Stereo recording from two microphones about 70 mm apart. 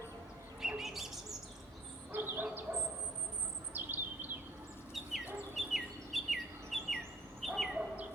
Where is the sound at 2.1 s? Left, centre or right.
Right.